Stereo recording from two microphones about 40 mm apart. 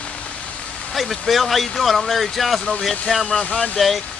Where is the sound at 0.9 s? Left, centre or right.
Centre.